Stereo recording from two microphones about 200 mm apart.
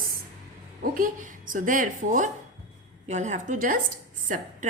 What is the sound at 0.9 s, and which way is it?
A woman's voice, 40° right (ahead or behind).